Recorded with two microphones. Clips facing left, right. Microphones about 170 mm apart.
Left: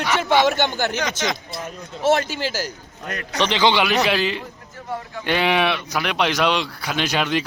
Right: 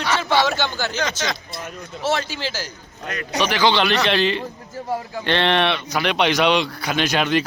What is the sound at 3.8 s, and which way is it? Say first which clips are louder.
A man's voice: right 1 dB; 5° left (ahead or behind).